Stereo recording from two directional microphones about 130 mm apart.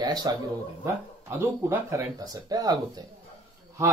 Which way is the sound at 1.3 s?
20° right (ahead or behind).